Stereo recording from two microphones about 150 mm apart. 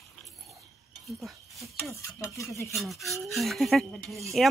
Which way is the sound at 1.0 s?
Centre (ahead or behind).